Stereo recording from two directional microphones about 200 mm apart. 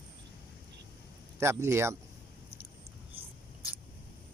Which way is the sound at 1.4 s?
15° right (ahead or behind).